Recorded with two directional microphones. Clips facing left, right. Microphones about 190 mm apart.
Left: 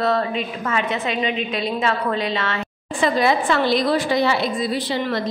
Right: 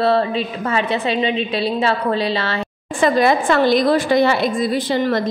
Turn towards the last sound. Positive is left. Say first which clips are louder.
# right 5 dB
turn(degrees=-45)  # may be behind; listen again after turning